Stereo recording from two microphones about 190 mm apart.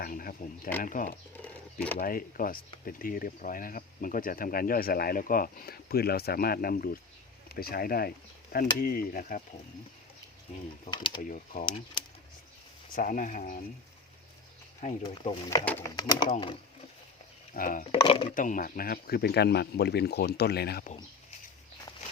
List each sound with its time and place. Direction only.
0.0 s speech: 50° left (ahead or behind)
1.4 s a sound: 5° left (ahead or behind)
2.0 s speech: 50° left (ahead or behind)
10.9 s speech: 25° left (ahead or behind)
11.2 s speech: 45° left (ahead or behind)
12.9 s speech: 45° left (ahead or behind)
14.8 s speech: 35° left (ahead or behind)
15.3 s speech: 20° left (ahead or behind)
17.5 s speech: 45° left (ahead or behind)
17.9 s speech: 25° left (ahead or behind)
18.3 s speech: 45° left (ahead or behind)